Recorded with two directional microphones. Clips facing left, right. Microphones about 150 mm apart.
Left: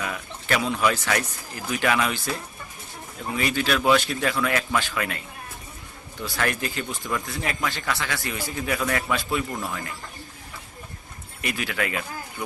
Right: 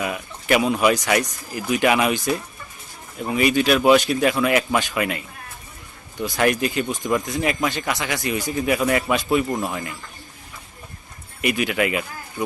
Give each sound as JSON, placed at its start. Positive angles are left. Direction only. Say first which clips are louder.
{"t": 0.0, "sound": "speech", "louder": "right 5 dB", "side_deg": -15}
{"t": 6.2, "sound": "speech", "louder": "right 7 dB", "side_deg": -15}
{"t": 11.3, "sound": "speech", "louder": "right 7 dB", "side_deg": -20}